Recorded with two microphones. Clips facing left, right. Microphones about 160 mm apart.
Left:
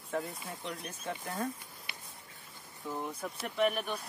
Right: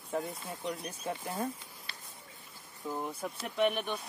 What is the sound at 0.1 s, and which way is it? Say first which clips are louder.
Speech: right 1 dB; centre (ahead or behind).